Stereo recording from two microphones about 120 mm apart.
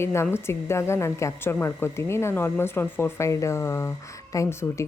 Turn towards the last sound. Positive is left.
turn(degrees=25)  # may be behind; listen again after turning